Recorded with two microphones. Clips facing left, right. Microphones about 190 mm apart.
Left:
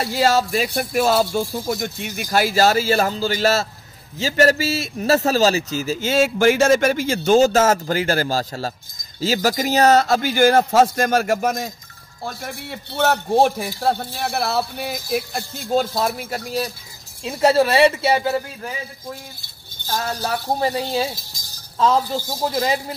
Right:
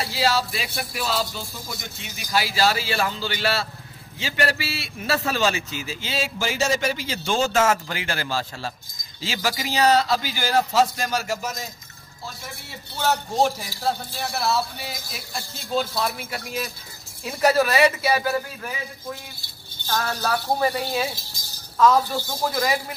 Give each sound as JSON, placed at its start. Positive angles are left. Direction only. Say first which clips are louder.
{"t": 0.0, "sound": "a man's voice", "louder": "left 5 dB", "side_deg": 50}
{"t": 17.2, "sound": "speech", "louder": "left 4 dB", "side_deg": 25}
{"t": 20.2, "sound": "speech", "louder": "even", "side_deg": 25}